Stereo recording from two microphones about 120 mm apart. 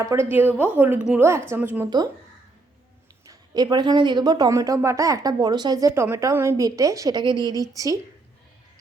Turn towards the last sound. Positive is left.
turn(degrees=-30)  # may be behind; listen again after turning